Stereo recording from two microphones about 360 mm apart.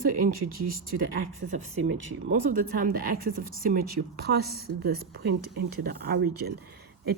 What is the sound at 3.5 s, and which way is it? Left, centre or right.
Speech, right.